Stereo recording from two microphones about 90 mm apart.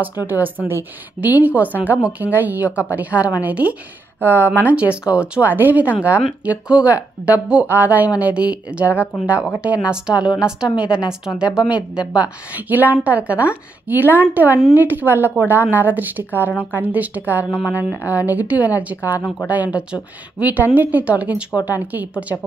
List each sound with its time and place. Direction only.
0.2 s a woman's voice: 20° right (ahead or behind)